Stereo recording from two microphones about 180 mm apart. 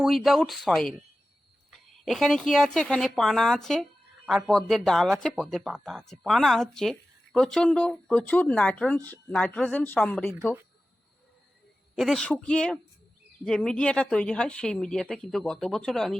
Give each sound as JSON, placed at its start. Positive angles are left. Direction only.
{"t": 0.0, "sound": "speech", "side_deg": 0}
{"t": 11.9, "sound": "speech", "side_deg": 0}